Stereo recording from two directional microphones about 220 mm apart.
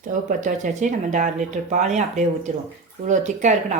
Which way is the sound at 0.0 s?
35° right (ahead or behind).